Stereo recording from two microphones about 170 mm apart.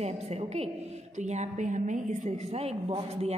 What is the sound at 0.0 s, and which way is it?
A woman's voice, 40° right (ahead or behind).